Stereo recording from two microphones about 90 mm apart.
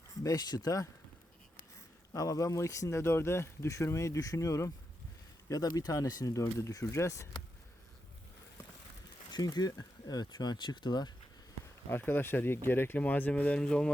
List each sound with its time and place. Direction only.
0.2 s speech: 45° left (ahead or behind)
2.1 s speech: 40° left (ahead or behind)
9.3 s speech: 50° left (ahead or behind)
11.9 s speech: 25° left (ahead or behind); by 13.9 s 10° left (ahead or behind)